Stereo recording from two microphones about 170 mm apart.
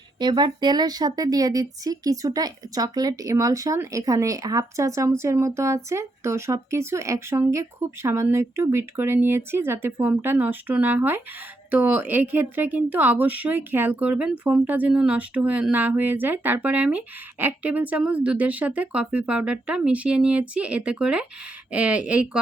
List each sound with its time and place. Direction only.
0.2 s speech: 25° right (ahead or behind); by 22.4 s 5° right (ahead or behind)